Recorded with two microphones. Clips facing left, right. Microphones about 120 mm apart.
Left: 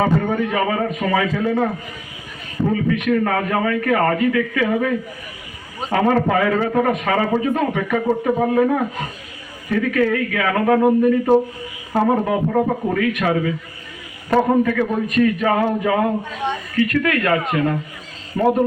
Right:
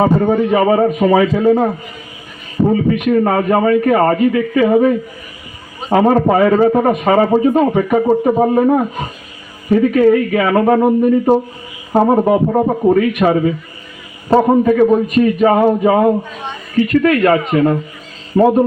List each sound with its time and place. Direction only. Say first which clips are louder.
0.1 s a man's voice: right 6 dB; 40° right (ahead or behind)
0.4 s a man's voice: right 8 dB; 30° right (ahead or behind)
2.6 s a man's voice: right 6 dB; 30° right (ahead or behind)
6.1 s a man's voice: right 5 dB; 30° right (ahead or behind)
11.9 s a man's voice: right 6 dB; 30° right (ahead or behind)